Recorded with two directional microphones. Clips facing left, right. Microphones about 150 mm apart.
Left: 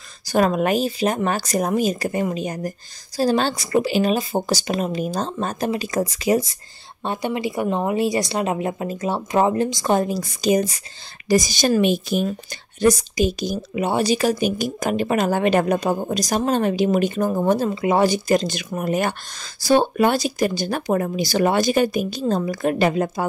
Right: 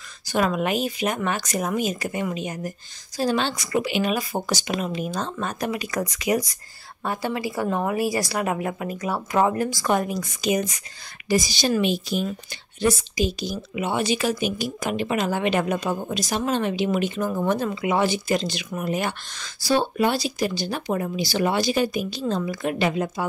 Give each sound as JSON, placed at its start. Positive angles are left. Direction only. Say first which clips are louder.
{"t": 0.3, "sound": "speech", "louder": "left 4 dB", "side_deg": 40}
{"t": 7.1, "sound": "a woman's voice", "louder": "left 3 dB", "side_deg": 20}
{"t": 11.2, "sound": "speech", "louder": "left 4 dB", "side_deg": 45}
{"t": 17.4, "sound": "speech", "louder": "left 4 dB", "side_deg": 30}